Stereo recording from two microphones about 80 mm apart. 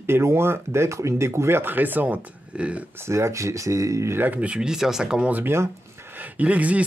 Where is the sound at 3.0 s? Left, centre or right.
Right.